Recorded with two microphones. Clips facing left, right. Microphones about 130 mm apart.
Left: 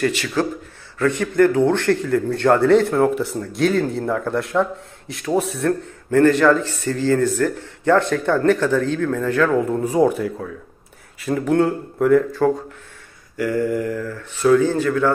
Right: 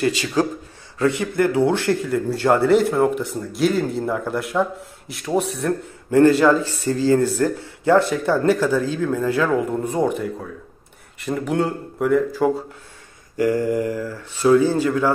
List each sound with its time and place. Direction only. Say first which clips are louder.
0.0 s speech: right 1 dB; 15° right (ahead or behind); by 5.7 s centre (ahead or behind)
5.7 s speech: left 2 dB; 10° right (ahead or behind)
9.7 s speech: left 4 dB; centre (ahead or behind)
13.4 s speech: right 1 dB; 20° right (ahead or behind)